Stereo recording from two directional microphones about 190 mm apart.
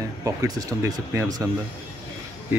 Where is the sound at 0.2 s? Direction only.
15° right (ahead or behind).